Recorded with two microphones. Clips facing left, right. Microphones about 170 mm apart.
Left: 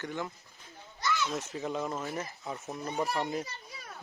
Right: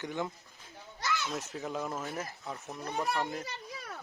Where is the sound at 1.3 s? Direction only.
Centre (ahead or behind).